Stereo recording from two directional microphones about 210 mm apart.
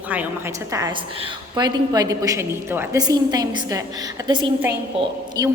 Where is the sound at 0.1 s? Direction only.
10° right (ahead or behind).